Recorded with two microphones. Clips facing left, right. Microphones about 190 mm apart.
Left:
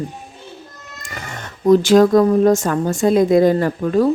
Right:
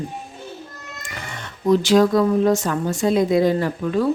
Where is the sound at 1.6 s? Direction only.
50° left (ahead or behind).